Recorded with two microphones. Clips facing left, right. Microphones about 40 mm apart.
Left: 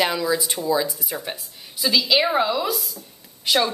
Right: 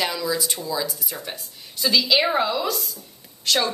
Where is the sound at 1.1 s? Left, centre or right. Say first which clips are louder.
Left 3 dB; centre.